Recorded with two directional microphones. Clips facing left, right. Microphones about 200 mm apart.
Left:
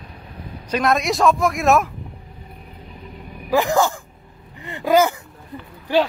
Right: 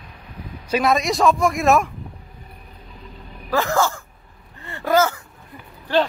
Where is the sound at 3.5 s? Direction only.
15° left (ahead or behind).